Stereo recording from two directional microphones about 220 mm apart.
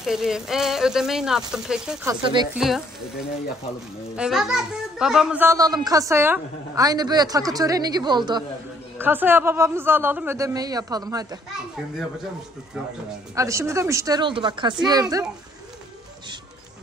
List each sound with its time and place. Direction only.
0.0 s speech: centre (ahead or behind)
2.0 s speech: 20° right (ahead or behind)
2.5 s speech: centre (ahead or behind)
4.2 s a child's voice: centre (ahead or behind); by 8.5 s 20° right (ahead or behind)
8.9 s a child's voice: 10° right (ahead or behind)
13.3 s a child's voice: 15° right (ahead or behind)